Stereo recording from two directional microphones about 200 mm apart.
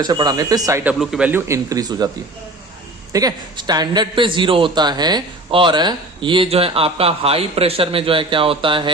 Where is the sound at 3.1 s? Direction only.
20° right (ahead or behind).